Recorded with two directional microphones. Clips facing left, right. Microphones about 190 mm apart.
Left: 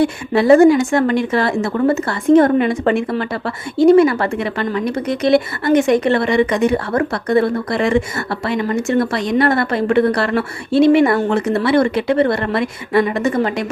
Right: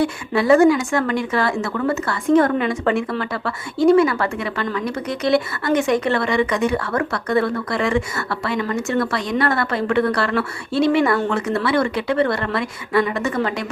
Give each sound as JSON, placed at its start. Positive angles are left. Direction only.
{"t": 0.3, "sound": "a woman's voice", "side_deg": 25}